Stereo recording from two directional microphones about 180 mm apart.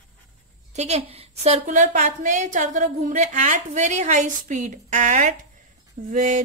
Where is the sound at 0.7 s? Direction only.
35° right (ahead or behind).